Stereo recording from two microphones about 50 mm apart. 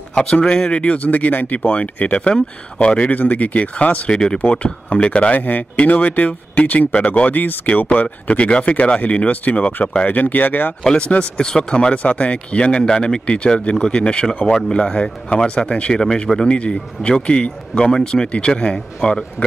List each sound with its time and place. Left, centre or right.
0.1 s speech: centre; by 2.2 s left
2.2 s speech: centre
3.1 s speech: left
8.3 s speech: left
10.8 s speech: centre
16.4 s speech: left